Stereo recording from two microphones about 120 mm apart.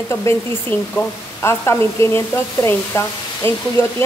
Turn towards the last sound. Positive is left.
turn(degrees=20)  # may be behind; listen again after turning